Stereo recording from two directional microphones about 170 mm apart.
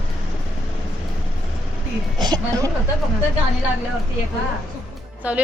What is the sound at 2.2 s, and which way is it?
Speech, 25° right (ahead or behind).